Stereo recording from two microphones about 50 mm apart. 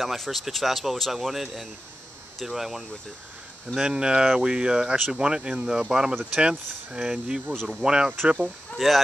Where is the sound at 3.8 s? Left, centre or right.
Centre.